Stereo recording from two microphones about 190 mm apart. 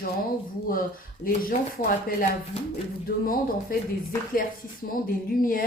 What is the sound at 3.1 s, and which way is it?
Speech, 50° left (ahead or behind).